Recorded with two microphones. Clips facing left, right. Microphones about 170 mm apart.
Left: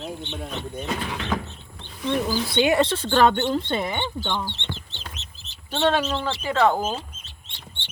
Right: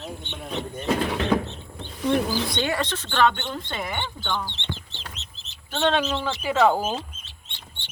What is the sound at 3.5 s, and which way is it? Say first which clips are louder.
Speech: left 5 dB; 25° left (ahead or behind).